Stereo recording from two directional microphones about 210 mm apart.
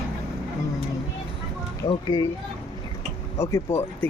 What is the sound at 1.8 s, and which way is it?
Speech, 20° left (ahead or behind).